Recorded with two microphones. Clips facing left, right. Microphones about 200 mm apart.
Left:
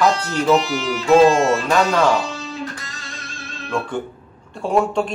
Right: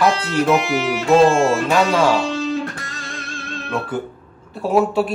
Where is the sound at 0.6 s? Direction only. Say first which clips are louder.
Right 3 dB; 60° right (ahead or behind).